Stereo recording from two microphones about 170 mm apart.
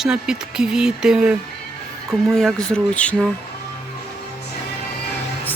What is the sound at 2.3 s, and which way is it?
Speech, 5° left (ahead or behind).